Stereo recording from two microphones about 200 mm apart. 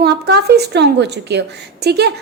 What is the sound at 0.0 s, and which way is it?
A woman's voice, 55° right (ahead or behind).